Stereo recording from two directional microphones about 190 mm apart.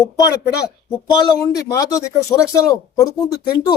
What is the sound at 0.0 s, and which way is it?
A man's voice, 20° left (ahead or behind).